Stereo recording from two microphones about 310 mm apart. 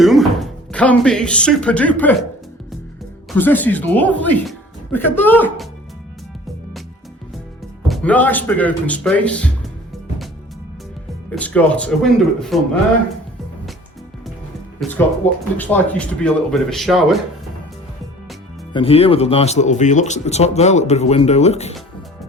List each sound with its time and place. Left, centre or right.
0.0 s speech: centre
3.3 s speech: centre
7.9 s speech: centre
11.3 s speech: centre
14.8 s speech: centre
18.7 s speech: centre